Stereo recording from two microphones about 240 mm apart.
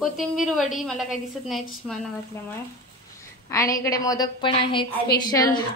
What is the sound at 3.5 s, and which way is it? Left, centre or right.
A woman's voice, centre.